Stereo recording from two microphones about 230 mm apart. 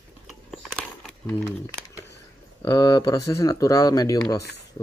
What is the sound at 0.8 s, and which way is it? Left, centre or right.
Crumpling, centre.